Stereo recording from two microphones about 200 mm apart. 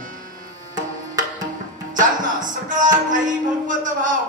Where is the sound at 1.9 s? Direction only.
40° right (ahead or behind).